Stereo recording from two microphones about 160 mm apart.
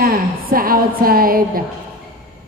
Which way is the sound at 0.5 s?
65° right (ahead or behind).